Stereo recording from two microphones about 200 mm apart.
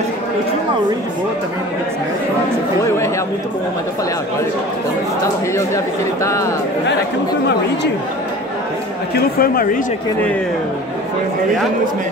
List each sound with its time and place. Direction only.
6.2 s speech: 15° left (ahead or behind)
9.1 s a woman's voice: 45° left (ahead or behind)